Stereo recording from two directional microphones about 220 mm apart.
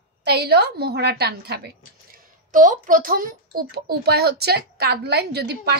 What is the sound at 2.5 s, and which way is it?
Speech, 35° right (ahead or behind).